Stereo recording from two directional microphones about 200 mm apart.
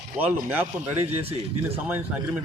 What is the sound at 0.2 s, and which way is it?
Speech, 10° right (ahead or behind).